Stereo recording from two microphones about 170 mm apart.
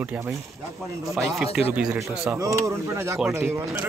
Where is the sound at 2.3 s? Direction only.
20° right (ahead or behind).